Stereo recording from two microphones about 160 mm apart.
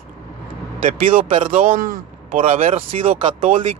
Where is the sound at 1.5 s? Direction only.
60° right (ahead or behind).